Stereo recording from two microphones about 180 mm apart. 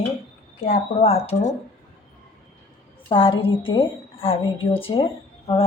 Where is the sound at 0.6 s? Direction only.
40° left (ahead or behind).